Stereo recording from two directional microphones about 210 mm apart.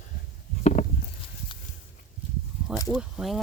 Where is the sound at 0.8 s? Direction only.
30° left (ahead or behind).